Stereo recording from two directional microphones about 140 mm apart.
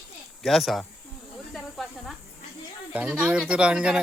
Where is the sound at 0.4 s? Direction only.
Centre (ahead or behind).